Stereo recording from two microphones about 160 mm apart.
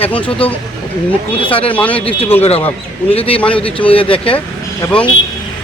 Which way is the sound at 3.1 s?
35° left (ahead or behind).